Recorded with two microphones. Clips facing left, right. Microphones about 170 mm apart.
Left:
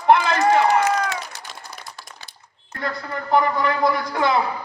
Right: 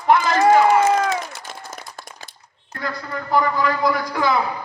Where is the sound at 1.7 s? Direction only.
45° right (ahead or behind).